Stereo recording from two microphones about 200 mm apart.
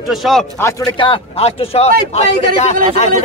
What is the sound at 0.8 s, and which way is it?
A man's voice, 25° left (ahead or behind).